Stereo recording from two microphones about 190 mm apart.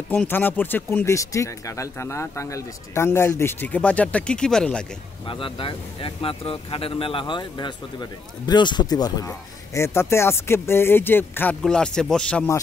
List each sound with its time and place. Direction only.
0.1 s speech: 10° left (ahead or behind)
5.2 s speech: 25° left (ahead or behind); by 12.5 s 5° left (ahead or behind)